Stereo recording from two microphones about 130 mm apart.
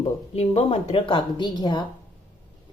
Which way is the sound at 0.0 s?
50° left (ahead or behind).